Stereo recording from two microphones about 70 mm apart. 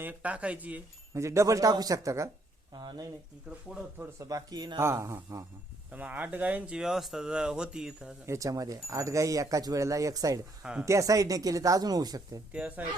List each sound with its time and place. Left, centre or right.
0.0 s speech: right
1.1 s speech: right
2.7 s speech: right
4.2 s speech: right
4.5 s speech: right
4.8 s speech: right
5.9 s speech: right
6.7 s speech: centre
8.3 s speech: right
10.6 s speech: centre
10.8 s speech: right
12.5 s speech: centre